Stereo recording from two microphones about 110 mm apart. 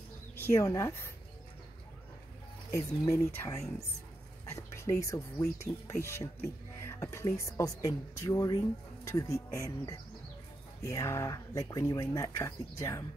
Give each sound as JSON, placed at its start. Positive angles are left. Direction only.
{"t": 0.4, "sound": "speech", "side_deg": 30}
{"t": 2.7, "sound": "speech", "side_deg": 30}